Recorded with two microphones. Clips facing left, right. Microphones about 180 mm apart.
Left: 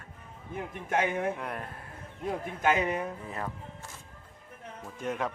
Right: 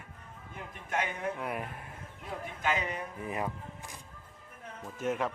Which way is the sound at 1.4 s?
5° right (ahead or behind).